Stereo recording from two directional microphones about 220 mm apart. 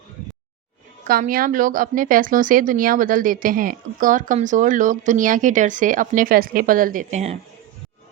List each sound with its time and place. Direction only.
1.0 s a woman's voice: 40° right (ahead or behind)